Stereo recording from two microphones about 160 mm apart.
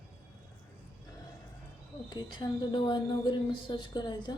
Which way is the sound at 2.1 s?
30° left (ahead or behind).